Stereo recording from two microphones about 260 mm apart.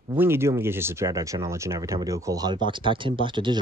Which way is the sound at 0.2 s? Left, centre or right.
Centre.